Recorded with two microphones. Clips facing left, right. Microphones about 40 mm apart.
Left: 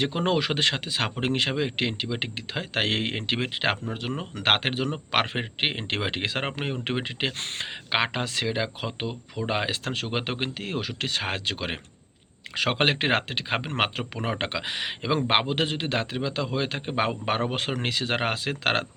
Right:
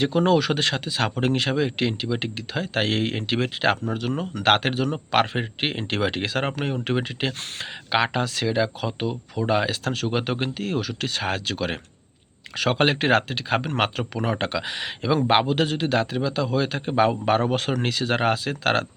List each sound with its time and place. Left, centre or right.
0.2 s speech: left